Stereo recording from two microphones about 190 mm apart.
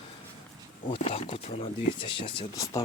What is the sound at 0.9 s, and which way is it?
Speech, 30° left (ahead or behind).